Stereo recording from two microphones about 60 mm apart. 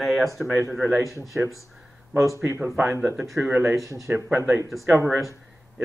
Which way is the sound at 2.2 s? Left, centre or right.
Right.